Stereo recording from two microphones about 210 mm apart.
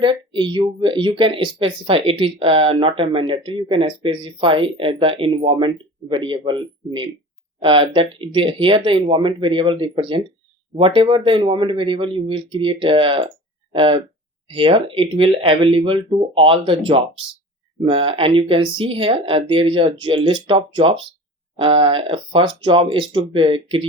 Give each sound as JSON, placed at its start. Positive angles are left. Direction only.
{"t": 0.0, "sound": "speech", "side_deg": -25}